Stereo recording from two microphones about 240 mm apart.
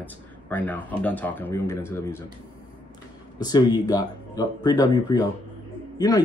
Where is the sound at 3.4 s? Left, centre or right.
Centre.